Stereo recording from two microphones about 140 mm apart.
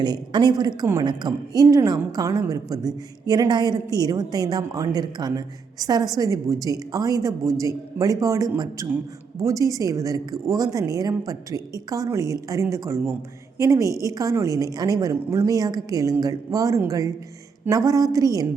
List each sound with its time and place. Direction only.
0.0 s a woman's voice: 30° right (ahead or behind)